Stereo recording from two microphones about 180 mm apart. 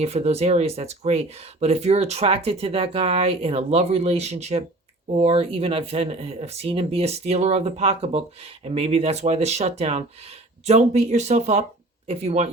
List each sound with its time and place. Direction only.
0.0 s speech: 35° right (ahead or behind)